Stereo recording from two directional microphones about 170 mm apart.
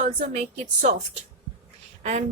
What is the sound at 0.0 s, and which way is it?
Speech, 50° right (ahead or behind).